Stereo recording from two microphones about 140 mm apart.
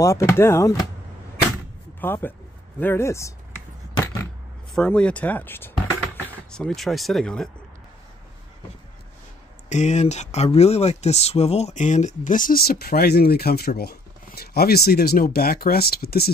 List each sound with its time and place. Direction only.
0.0 s speech: 20° left (ahead or behind)
2.0 s speech: 15° left (ahead or behind)
4.7 s speech: 10° left (ahead or behind)
9.7 s speech: 55° left (ahead or behind); by 16.3 s 90° left